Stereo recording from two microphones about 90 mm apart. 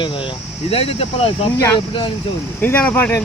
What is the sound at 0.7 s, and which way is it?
Speech, 90° left.